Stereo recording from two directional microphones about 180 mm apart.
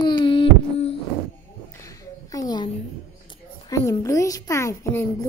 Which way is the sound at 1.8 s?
20° left (ahead or behind).